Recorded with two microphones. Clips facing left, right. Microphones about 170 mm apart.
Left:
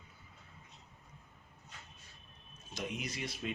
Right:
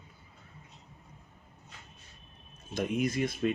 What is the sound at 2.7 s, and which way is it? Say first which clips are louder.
Speech: right 11 dB; 50° right (ahead or behind).